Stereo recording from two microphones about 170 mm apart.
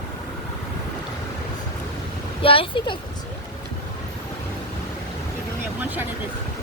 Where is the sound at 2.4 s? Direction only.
30° left (ahead or behind).